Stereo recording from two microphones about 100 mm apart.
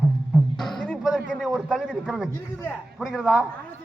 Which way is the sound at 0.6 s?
5° left (ahead or behind).